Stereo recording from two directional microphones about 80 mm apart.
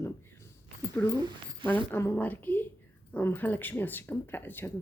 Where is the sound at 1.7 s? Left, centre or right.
Left.